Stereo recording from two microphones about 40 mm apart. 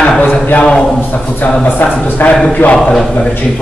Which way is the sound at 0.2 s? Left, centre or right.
Left.